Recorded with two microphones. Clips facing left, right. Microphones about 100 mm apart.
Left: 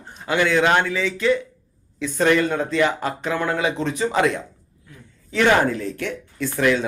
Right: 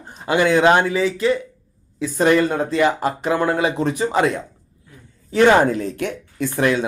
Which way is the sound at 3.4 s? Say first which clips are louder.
Right 2 dB; 35° right (ahead or behind).